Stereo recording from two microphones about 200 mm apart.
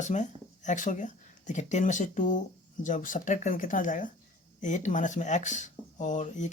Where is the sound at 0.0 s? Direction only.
35° left (ahead or behind).